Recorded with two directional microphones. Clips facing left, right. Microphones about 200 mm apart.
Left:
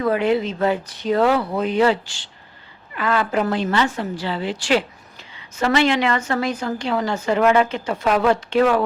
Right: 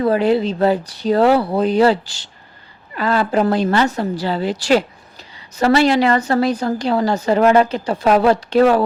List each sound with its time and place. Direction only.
0.0 s a woman's voice: 35° right (ahead or behind)